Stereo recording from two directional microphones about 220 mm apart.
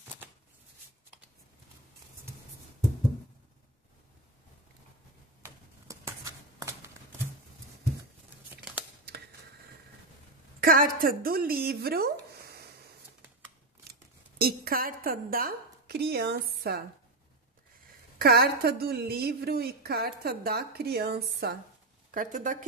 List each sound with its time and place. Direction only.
5.4 s typewriter: 15° right (ahead or behind)
10.6 s a woman's voice: 40° right (ahead or behind)
14.4 s a woman's voice: 40° right (ahead or behind)
18.2 s speech: 45° right (ahead or behind)